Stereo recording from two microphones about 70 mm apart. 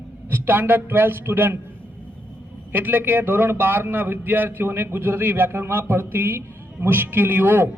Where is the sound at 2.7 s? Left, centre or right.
Right.